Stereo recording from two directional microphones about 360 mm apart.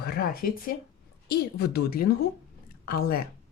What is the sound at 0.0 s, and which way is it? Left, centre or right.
Speech, left.